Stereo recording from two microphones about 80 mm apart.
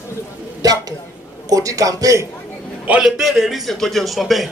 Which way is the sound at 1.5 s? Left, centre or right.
Right.